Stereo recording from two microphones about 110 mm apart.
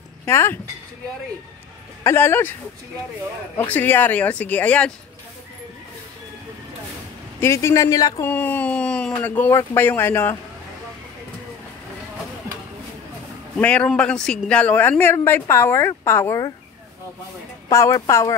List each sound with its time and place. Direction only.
0.2 s speech: 20° left (ahead or behind)
2.0 s speech: 20° left (ahead or behind)
3.5 s speech: 15° left (ahead or behind)
7.3 s speech: 25° left (ahead or behind)
8.3 s speech: 15° left (ahead or behind)
13.6 s speech: 10° left (ahead or behind)
17.6 s speech: 30° left (ahead or behind)